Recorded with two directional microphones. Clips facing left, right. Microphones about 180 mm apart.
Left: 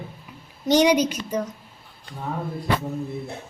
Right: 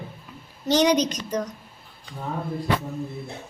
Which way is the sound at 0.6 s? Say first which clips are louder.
Left 2 dB; 10° left (ahead or behind).